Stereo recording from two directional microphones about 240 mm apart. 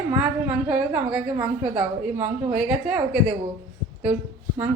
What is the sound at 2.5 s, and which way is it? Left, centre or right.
Speech, centre.